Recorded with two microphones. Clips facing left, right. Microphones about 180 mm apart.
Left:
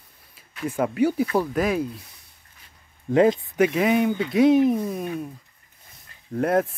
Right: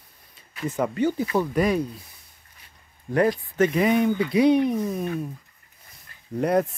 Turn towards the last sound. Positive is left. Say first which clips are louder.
# even
turn(degrees=0)  # may be behind; listen again after turning